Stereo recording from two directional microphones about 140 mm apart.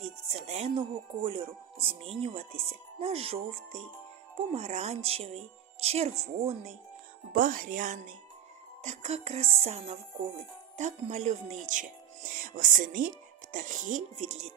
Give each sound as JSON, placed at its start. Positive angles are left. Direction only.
{"t": 0.4, "sound": "a woman's voice", "side_deg": -50}
{"t": 7.3, "sound": "speech", "side_deg": -80}
{"t": 8.8, "sound": "a woman's voice", "side_deg": -50}
{"t": 14.2, "sound": "a woman's voice", "side_deg": -50}